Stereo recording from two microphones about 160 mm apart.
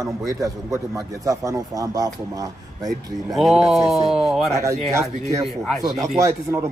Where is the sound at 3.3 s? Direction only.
Centre (ahead or behind).